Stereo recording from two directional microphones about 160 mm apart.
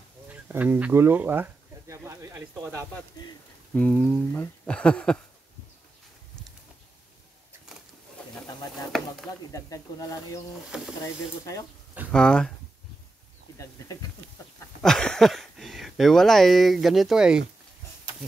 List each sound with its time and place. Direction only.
0.3 s speech: 10° right (ahead or behind)
3.7 s speech: 10° left (ahead or behind)
8.9 s chopping: centre (ahead or behind)
9.5 s speech: 20° left (ahead or behind)
12.1 s speech: 5° left (ahead or behind)
14.8 s speech: 5° left (ahead or behind)